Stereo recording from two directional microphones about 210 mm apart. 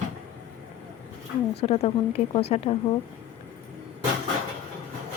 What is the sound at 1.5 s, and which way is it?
Speech, 30° left (ahead or behind).